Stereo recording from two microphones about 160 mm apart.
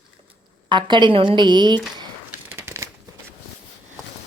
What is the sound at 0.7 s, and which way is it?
A woman's voice, 30° right (ahead or behind).